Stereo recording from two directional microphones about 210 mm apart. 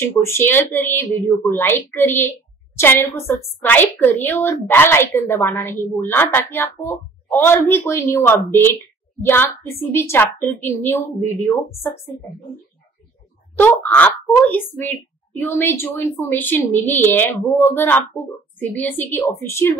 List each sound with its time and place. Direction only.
0.2 s a woman's voice: 10° left (ahead or behind)
9.9 s a woman's voice: 10° left (ahead or behind)
13.6 s a woman's voice: 10° left (ahead or behind)